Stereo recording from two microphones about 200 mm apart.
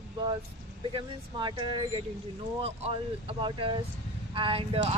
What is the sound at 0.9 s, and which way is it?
Speech, 20° right (ahead or behind).